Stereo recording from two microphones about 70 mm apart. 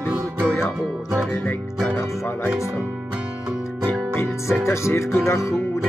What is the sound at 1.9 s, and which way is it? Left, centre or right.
Speech, left.